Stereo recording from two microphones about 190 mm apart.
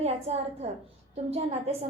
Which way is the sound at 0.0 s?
35° right (ahead or behind).